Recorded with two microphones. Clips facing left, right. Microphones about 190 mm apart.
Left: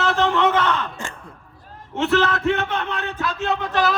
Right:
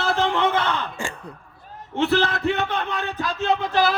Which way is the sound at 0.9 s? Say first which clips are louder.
Right 3 dB; 10° right (ahead or behind).